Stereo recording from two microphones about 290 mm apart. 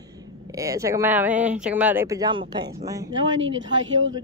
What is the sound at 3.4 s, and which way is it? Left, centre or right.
Speech, right.